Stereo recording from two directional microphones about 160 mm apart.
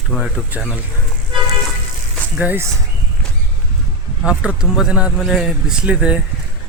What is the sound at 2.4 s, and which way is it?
Speech, 10° right (ahead or behind).